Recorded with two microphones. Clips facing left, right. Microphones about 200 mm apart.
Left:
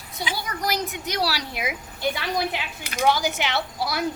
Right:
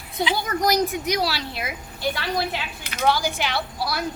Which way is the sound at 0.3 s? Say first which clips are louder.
Right 5 dB; 45° right (ahead or behind).